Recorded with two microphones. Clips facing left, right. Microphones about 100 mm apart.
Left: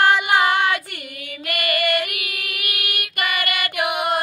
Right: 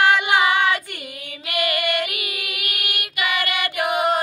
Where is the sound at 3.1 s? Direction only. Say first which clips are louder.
Right 1 dB; 50° left (ahead or behind).